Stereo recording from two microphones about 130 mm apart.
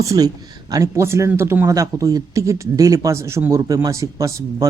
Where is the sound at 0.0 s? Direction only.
25° right (ahead or behind).